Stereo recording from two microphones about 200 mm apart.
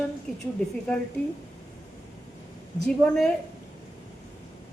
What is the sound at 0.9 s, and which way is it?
Speech, 5° left (ahead or behind).